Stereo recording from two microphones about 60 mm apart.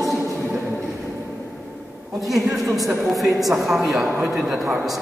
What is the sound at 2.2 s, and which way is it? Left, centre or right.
A man's voice, centre.